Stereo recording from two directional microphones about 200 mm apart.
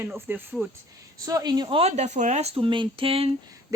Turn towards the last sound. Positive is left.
turn(degrees=-15)  # may be behind; listen again after turning